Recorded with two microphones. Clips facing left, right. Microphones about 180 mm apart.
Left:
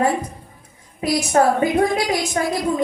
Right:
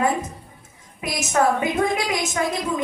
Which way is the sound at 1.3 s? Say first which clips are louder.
Left 2 dB; 35° left (ahead or behind).